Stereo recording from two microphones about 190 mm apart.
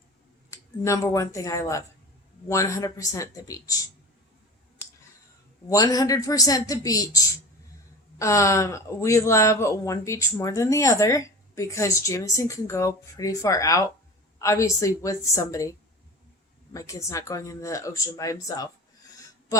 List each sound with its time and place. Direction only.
0.9 s speech: 15° left (ahead or behind)
5.6 s a woman's voice: 20° left (ahead or behind)
8.2 s speech: 15° left (ahead or behind)
16.7 s speech: 15° left (ahead or behind)